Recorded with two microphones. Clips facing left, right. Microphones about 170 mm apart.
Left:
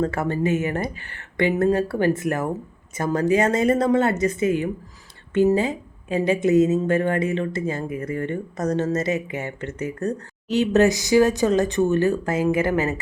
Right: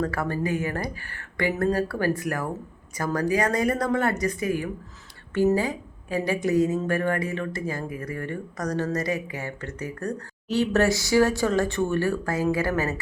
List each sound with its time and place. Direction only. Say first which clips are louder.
0.0 s a woman's voice: left 4 dB; 25° left (ahead or behind)